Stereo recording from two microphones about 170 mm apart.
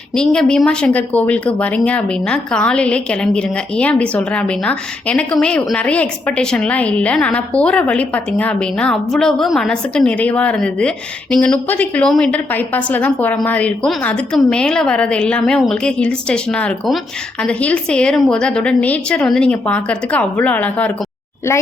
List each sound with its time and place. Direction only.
0.1 s speech: 5° left (ahead or behind)